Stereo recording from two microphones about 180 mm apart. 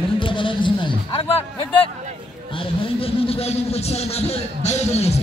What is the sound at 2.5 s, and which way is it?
Speech, 30° left (ahead or behind).